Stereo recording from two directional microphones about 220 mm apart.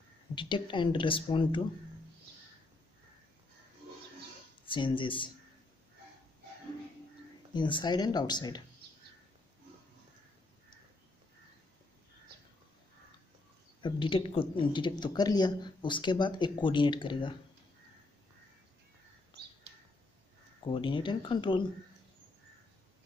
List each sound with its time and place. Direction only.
0.3 s speech: 20° left (ahead or behind)
4.6 s speech: 20° left (ahead or behind)
7.5 s speech: 20° left (ahead or behind)
13.8 s speech: 20° left (ahead or behind)
20.7 s speech: 20° left (ahead or behind)